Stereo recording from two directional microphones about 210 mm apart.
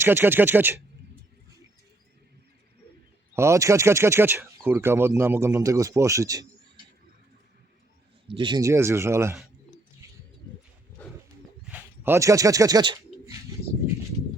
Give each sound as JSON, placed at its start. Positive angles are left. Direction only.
{"t": 0.0, "sound": "speech", "side_deg": -10}
{"t": 3.3, "sound": "speech", "side_deg": -15}
{"t": 8.3, "sound": "speech", "side_deg": -25}
{"t": 11.6, "sound": "a sound", "side_deg": -10}